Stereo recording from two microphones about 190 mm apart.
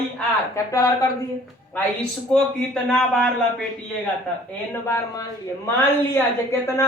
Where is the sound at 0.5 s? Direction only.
15° left (ahead or behind).